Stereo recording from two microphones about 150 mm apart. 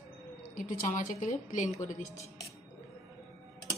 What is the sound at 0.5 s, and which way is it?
A woman's voice, 60° left (ahead or behind).